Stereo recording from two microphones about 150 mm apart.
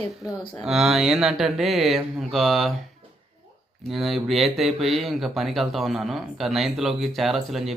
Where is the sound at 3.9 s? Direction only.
Centre (ahead or behind).